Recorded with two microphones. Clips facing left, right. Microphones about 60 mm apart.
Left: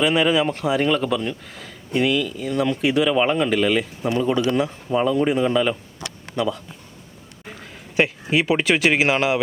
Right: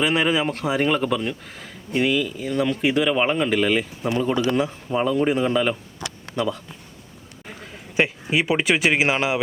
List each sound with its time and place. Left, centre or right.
0.0 s speech: centre
2.2 s speech: centre
2.5 s speech: centre
7.9 s speech: centre